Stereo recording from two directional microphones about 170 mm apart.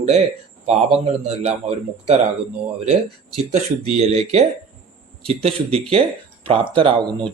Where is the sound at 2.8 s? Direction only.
40° right (ahead or behind).